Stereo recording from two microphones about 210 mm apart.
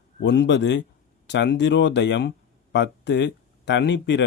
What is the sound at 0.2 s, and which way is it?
Speech, 55° left (ahead or behind).